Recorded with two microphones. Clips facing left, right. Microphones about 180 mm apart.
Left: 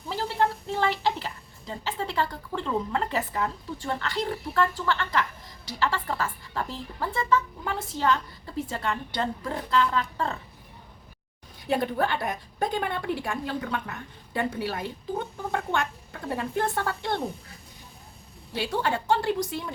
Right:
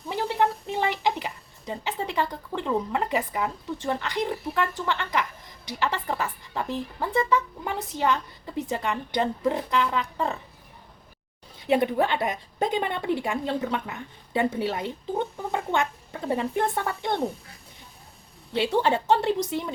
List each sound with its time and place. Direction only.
0.1 s a woman's voice: 15° right (ahead or behind)
11.7 s a woman's voice: 20° right (ahead or behind)
18.5 s a woman's voice: 25° right (ahead or behind)